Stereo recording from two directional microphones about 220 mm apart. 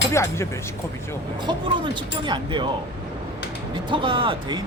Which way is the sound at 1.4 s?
20° right (ahead or behind).